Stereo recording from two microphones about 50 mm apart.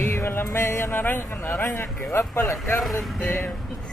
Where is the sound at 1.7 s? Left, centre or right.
Left.